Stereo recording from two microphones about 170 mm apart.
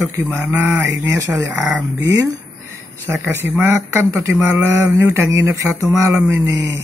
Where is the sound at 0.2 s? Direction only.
10° right (ahead or behind).